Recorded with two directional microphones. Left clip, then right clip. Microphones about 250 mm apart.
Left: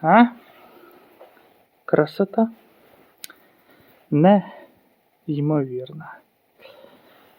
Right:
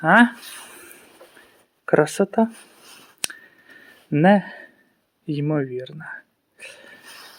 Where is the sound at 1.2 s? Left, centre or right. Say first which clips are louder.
Left 4 dB; right.